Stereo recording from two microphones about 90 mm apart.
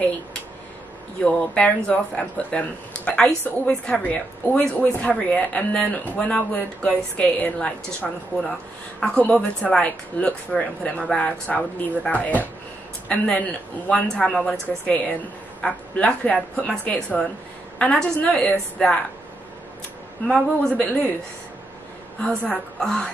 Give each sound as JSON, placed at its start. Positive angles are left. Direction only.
{"t": 1.2, "sound": "a woman's voice", "side_deg": 10}
{"t": 20.6, "sound": "a woman's voice", "side_deg": 10}
{"t": 22.2, "sound": "a woman's voice", "side_deg": 10}